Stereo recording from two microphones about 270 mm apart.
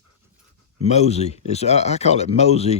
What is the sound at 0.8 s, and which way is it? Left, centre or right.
Speech, left.